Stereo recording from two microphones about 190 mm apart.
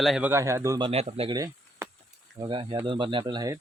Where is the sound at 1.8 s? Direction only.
15° right (ahead or behind).